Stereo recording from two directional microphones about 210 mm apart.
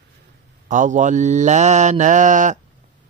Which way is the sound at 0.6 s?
35° right (ahead or behind).